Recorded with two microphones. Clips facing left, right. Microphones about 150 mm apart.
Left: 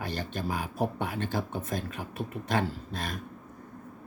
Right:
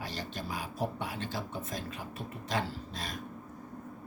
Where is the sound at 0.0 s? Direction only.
55° left (ahead or behind).